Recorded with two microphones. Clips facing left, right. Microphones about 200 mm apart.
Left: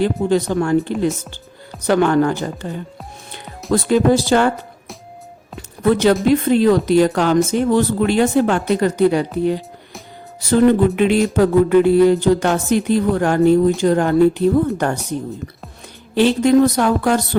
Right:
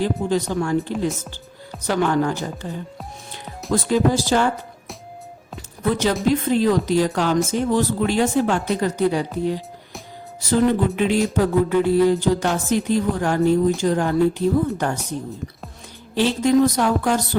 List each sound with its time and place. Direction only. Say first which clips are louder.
0.0 s speech: left 4 dB; 65° left (ahead or behind)
1.9 s speech: left 5 dB; 60° left (ahead or behind)
5.9 s speech: left 6 dB; 60° left (ahead or behind)
10.7 s speech: left 5 dB; 65° left (ahead or behind)
16.1 s speech: left 4 dB; 60° left (ahead or behind)